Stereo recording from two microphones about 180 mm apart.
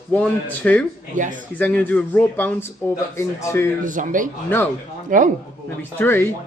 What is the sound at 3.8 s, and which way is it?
Speech, 45° right (ahead or behind).